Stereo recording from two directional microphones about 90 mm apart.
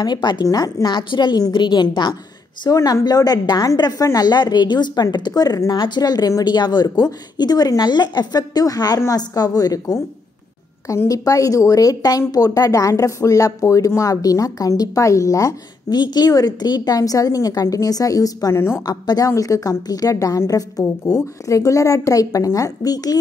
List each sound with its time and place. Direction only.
0.0 s speech: 55° left (ahead or behind)
2.7 s a woman's voice: 45° left (ahead or behind)
16.0 s a woman's voice: 50° left (ahead or behind); by 18.9 s 30° left (ahead or behind)
18.9 s a woman's voice: 45° left (ahead or behind)